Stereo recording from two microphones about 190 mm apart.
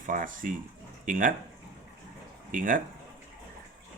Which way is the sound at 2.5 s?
45° right (ahead or behind).